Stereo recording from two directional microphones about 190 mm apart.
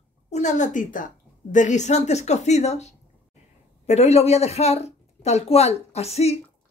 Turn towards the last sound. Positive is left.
turn(degrees=35)  # may be behind; listen again after turning